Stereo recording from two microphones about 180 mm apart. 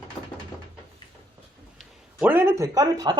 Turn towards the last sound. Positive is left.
turn(degrees=-20)  # may be behind; listen again after turning